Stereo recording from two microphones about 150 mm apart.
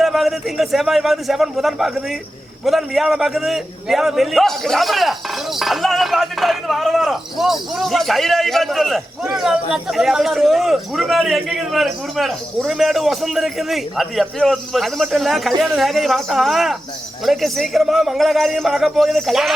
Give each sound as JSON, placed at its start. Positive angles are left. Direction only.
{"t": 0.0, "sound": "a man's voice", "side_deg": 0}